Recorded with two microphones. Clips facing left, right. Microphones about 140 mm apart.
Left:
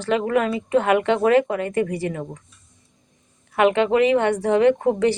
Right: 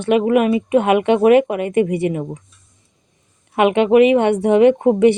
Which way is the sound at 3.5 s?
20° right (ahead or behind).